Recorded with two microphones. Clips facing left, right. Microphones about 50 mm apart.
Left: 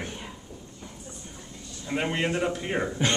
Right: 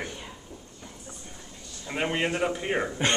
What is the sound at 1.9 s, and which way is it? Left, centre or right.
A man's voice, centre.